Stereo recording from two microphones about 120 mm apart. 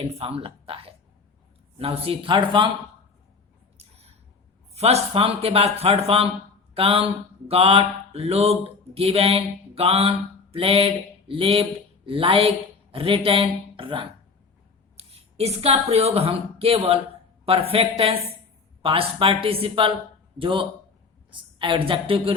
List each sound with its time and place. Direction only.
0.0 s speech: 60° right (ahead or behind); by 2.6 s 45° right (ahead or behind)
3.8 s a sound: 60° right (ahead or behind)
4.7 s speech: 60° right (ahead or behind)
6.7 s mantra: 50° right (ahead or behind)
12.0 s speech: 50° right (ahead or behind)
14.9 s a woman's voice: 60° right (ahead or behind)